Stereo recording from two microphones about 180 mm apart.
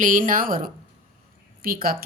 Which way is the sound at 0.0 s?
45° right (ahead or behind).